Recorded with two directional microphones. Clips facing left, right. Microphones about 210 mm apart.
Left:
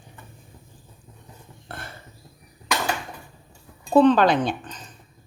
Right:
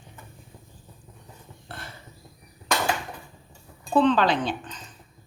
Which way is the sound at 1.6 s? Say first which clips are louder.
Left 3 dB; 50° left (ahead or behind).